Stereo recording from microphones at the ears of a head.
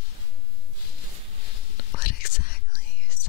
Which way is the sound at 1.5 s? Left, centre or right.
Left.